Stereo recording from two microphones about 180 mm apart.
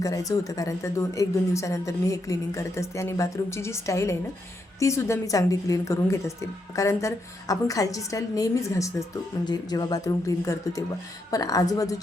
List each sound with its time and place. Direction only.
0.0 s a woman's voice: 20° left (ahead or behind)